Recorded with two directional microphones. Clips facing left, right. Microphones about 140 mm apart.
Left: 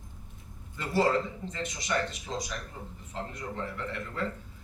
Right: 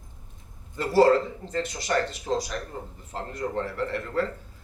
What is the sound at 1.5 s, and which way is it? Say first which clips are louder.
A man's voice: right 6 dB; 35° right (ahead or behind).